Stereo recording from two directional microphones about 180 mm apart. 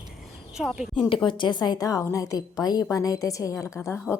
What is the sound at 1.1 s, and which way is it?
A woman's voice, 25° left (ahead or behind).